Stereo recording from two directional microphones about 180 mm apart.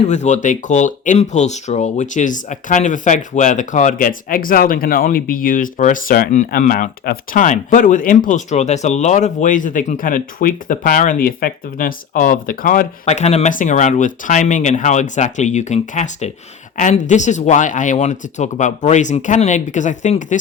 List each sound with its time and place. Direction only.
0.1 s speech: 40° left (ahead or behind)